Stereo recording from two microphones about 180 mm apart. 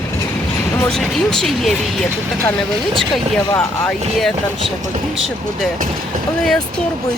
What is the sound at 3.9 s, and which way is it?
Speech, centre (ahead or behind).